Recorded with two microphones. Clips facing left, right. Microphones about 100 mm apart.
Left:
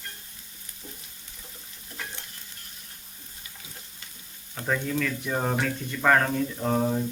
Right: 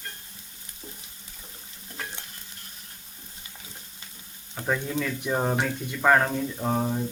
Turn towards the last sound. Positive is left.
turn(degrees=-5)  # may be behind; listen again after turning